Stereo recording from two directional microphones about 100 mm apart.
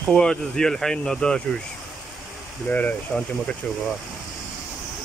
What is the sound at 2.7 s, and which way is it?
Speech, 20° left (ahead or behind).